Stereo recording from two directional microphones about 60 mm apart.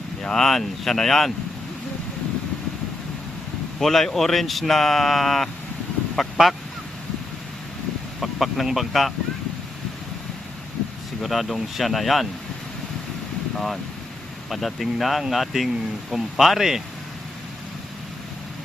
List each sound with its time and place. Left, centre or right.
0.2 s speech: centre
3.8 s speech: centre
8.2 s speech: centre
11.2 s speech: centre
14.5 s speech: centre